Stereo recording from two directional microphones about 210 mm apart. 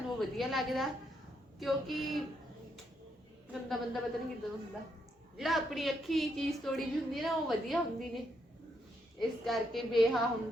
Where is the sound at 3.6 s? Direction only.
Centre (ahead or behind).